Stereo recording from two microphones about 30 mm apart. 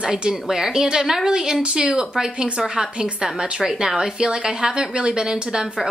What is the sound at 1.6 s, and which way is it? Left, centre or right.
A woman's voice, right.